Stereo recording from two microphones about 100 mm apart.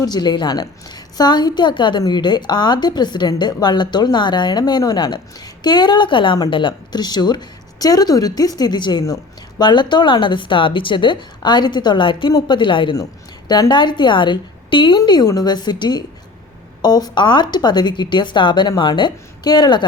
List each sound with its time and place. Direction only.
0.0 s a woman's voice: 45° left (ahead or behind)